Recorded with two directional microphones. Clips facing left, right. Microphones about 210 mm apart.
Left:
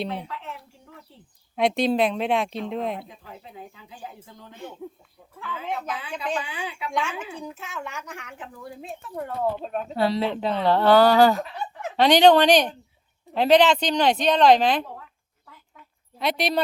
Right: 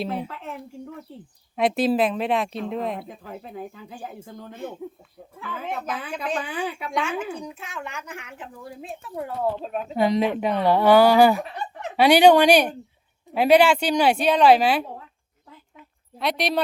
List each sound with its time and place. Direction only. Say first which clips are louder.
0.3 s a sound: right 2 dB; 50° right (ahead or behind)
1.5 s speech: right 1 dB; centre (ahead or behind)
3.1 s speech: right 6 dB; 50° right (ahead or behind)
6.9 s speech: right 2 dB; centre (ahead or behind)
9.9 s speech: right 3 dB; 15° right (ahead or behind)
16.1 s speech: even; centre (ahead or behind)